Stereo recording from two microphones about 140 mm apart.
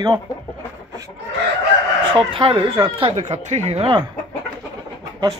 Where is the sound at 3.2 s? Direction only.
55° right (ahead or behind).